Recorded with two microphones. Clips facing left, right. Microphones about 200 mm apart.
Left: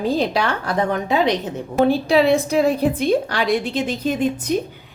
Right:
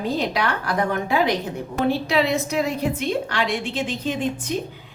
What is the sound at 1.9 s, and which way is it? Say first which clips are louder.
A woman's voice: left 4 dB; 30° left (ahead or behind).